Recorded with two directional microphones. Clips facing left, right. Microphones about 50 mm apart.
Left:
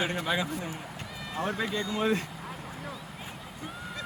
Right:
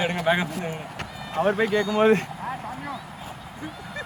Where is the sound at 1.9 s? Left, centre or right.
Right.